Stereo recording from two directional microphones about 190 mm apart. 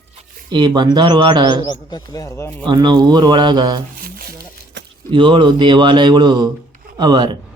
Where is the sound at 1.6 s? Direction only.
20° left (ahead or behind).